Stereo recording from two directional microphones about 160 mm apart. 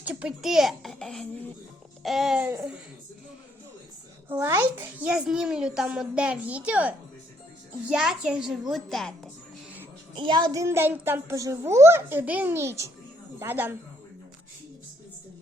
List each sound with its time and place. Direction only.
0.0 s a woman's voice: 10° right (ahead or behind)
4.3 s a child's voice: 15° right (ahead or behind); by 9.3 s centre (ahead or behind)
10.2 s a child's voice: 30° right (ahead or behind); by 13.7 s 15° right (ahead or behind)